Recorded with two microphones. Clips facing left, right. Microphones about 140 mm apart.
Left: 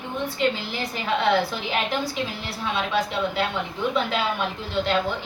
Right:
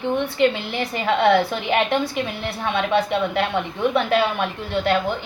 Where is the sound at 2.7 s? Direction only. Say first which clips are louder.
Right 5 dB; 60° right (ahead or behind).